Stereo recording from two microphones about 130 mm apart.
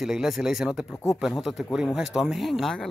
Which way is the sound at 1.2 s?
Centre (ahead or behind).